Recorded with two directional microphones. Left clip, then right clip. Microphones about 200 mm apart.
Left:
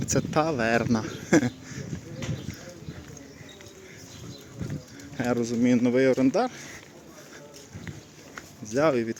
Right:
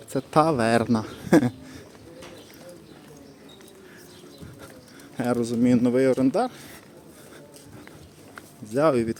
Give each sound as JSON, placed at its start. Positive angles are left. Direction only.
{"t": 0.3, "sound": "a man's voice", "side_deg": -20}
{"t": 5.1, "sound": "speech", "side_deg": -15}
{"t": 8.7, "sound": "speech", "side_deg": -15}